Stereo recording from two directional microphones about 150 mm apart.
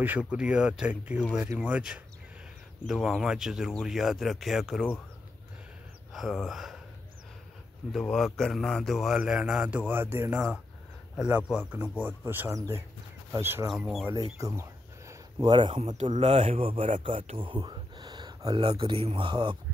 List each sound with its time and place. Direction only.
0.0 s speech: 10° right (ahead or behind)
6.1 s speech: centre (ahead or behind)
7.9 s speech: 5° left (ahead or behind); by 13.7 s 15° right (ahead or behind)
13.7 s speech: centre (ahead or behind)
14.4 s a sound: 20° right (ahead or behind)
16.2 s speech: 40° right (ahead or behind)